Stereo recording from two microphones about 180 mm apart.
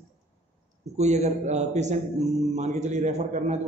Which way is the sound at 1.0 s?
40° right (ahead or behind).